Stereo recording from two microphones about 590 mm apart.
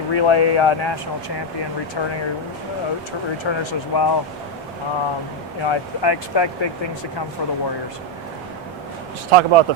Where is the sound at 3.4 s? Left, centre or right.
Left.